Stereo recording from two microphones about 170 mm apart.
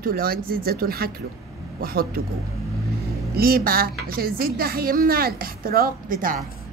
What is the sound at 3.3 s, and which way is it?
Speech, 60° right (ahead or behind).